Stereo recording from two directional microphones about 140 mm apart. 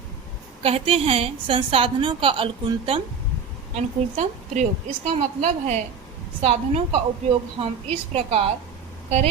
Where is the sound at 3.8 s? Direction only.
55° right (ahead or behind).